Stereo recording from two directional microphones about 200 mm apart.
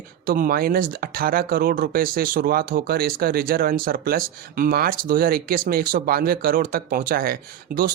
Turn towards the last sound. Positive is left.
turn(degrees=-45)  # may be behind; listen again after turning